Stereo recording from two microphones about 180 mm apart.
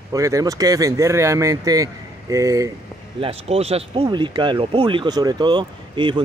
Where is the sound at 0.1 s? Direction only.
20° right (ahead or behind).